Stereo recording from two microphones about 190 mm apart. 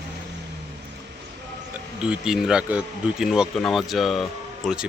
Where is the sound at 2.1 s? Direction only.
5° right (ahead or behind).